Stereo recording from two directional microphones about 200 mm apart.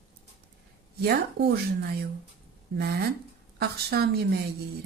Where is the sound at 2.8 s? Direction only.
55° right (ahead or behind).